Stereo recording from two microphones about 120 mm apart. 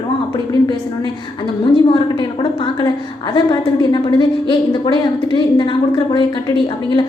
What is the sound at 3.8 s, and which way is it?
A woman's voice, 40° left (ahead or behind).